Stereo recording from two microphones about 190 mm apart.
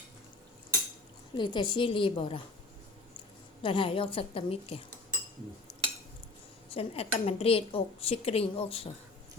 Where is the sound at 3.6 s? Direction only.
25° left (ahead or behind).